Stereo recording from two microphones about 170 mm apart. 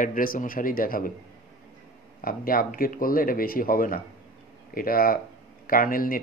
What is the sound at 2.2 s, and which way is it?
Speech, 55° left (ahead or behind).